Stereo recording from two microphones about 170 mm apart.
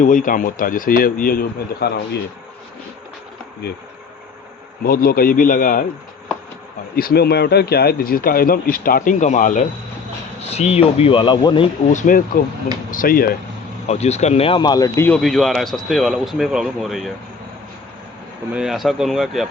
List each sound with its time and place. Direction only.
0.0 s speech: 50° left (ahead or behind)
3.6 s speech: 75° left (ahead or behind)
4.8 s speech: 60° left (ahead or behind)
6.9 s speech: 65° left (ahead or behind); by 11.7 s 30° left (ahead or behind)
11.9 s speech: 50° left (ahead or behind)
13.8 s speech: 40° left (ahead or behind); by 15.2 s 15° left (ahead or behind)
15.2 s speech: centre (ahead or behind)
18.5 s speech: centre (ahead or behind)